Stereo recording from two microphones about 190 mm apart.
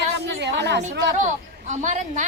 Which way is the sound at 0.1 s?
65° right (ahead or behind).